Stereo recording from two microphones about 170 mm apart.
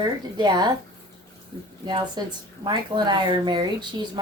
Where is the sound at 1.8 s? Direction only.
25° right (ahead or behind).